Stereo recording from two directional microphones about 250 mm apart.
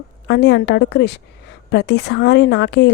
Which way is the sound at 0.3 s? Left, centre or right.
Left.